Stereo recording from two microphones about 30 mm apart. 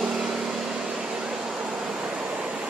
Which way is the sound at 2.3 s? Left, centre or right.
Right.